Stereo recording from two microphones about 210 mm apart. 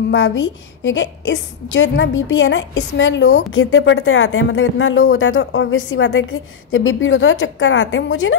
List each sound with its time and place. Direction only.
0.1 s a woman's voice: 65° left (ahead or behind)